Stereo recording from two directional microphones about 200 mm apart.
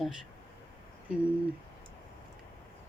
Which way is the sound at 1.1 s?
5° right (ahead or behind).